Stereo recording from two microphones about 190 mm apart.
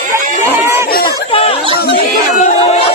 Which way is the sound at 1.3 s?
30° left (ahead or behind).